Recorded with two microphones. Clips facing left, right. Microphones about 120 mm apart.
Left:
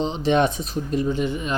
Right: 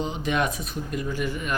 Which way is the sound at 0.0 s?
25° left (ahead or behind).